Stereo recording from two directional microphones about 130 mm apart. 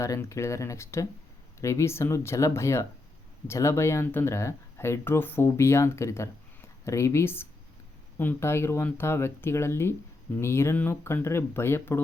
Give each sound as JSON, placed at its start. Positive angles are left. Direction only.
{"t": 0.0, "sound": "speech", "side_deg": 25}